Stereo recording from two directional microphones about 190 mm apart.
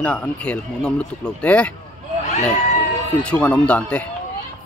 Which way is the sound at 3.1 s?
5° left (ahead or behind).